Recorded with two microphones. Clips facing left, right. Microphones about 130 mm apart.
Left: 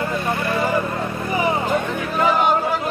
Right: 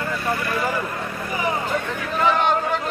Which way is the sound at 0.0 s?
20° left (ahead or behind).